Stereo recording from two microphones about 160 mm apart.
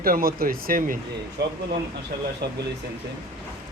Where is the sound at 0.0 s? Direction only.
65° right (ahead or behind).